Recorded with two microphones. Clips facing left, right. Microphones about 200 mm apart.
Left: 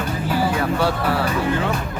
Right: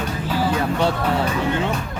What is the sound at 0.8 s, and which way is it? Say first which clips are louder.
Speech: even; 20° right (ahead or behind).